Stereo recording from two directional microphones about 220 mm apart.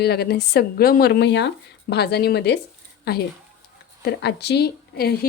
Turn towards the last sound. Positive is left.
turn(degrees=45)  # may be behind; listen again after turning